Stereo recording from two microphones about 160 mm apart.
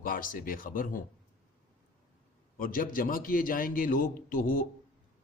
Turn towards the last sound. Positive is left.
turn(degrees=55)  # may be behind; listen again after turning